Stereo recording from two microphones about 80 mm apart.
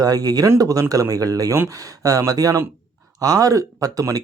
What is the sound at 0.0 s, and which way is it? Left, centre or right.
Speech, right.